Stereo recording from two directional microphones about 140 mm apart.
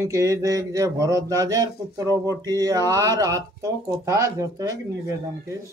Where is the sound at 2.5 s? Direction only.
25° right (ahead or behind).